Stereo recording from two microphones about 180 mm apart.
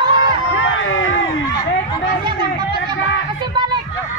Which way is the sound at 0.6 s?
90° left.